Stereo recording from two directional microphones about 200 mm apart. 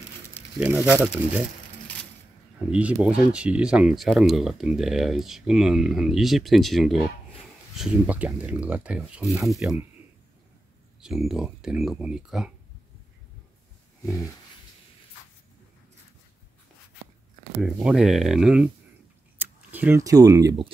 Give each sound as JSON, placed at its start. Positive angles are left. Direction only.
{"t": 0.3, "sound": "speech", "side_deg": -5}
{"t": 2.7, "sound": "speech", "side_deg": -5}
{"t": 11.0, "sound": "speech", "side_deg": -5}
{"t": 17.6, "sound": "speech", "side_deg": -5}